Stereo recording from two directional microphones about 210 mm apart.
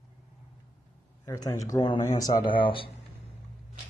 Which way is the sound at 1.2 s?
15° left (ahead or behind).